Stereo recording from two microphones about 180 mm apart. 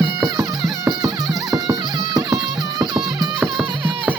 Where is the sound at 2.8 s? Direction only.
Centre (ahead or behind).